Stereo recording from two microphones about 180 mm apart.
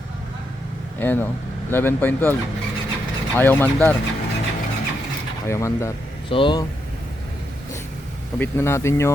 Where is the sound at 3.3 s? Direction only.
10° left (ahead or behind).